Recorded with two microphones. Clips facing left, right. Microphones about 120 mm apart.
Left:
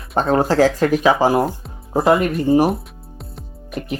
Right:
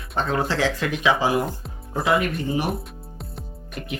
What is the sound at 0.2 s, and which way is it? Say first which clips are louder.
Speech: left 8 dB; 40° left (ahead or behind).